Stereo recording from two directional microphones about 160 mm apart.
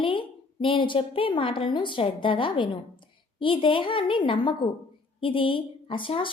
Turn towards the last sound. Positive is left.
turn(degrees=30)  # may be behind; listen again after turning